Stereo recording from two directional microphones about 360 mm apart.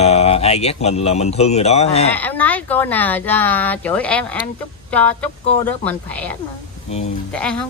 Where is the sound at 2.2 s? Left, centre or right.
Centre.